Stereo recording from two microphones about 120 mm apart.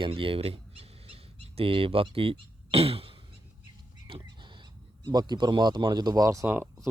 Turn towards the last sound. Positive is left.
turn(degrees=-20)  # may be behind; listen again after turning